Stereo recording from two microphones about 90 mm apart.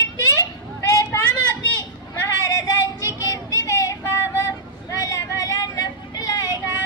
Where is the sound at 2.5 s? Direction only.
40° left (ahead or behind).